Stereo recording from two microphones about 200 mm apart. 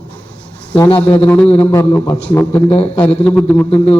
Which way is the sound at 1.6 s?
10° left (ahead or behind).